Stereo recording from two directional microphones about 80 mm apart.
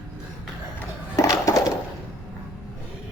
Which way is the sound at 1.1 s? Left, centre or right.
Left.